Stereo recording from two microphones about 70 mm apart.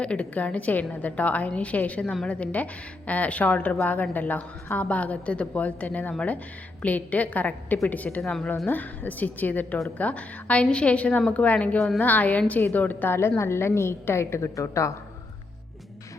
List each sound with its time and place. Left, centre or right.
0.0 s a woman's voice: centre
13.1 s a woman's voice: left